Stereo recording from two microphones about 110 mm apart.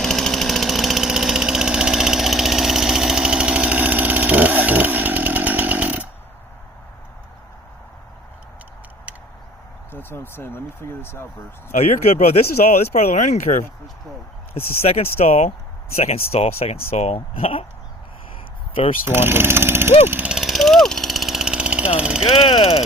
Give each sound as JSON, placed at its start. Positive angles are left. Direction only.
{"t": 0.0, "sound": "engine", "side_deg": 0}
{"t": 9.9, "sound": "speech", "side_deg": 20}
{"t": 12.6, "sound": "speech", "side_deg": 90}
{"t": 14.5, "sound": "speech", "side_deg": 65}
{"t": 16.0, "sound": "speech", "side_deg": 65}
{"t": 19.0, "sound": "speech", "side_deg": -20}
{"t": 20.1, "sound": "vehicle", "side_deg": -15}
{"t": 22.2, "sound": "speech", "side_deg": 60}